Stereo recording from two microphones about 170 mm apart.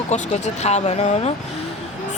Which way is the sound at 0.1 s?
40° left (ahead or behind).